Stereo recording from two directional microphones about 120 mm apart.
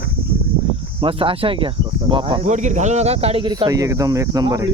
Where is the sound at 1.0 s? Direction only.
50° right (ahead or behind).